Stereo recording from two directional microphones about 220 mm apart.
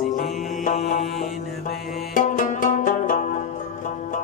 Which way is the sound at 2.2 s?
35° left (ahead or behind).